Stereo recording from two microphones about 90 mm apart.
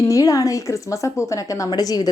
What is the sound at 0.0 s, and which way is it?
Speech, 40° left (ahead or behind).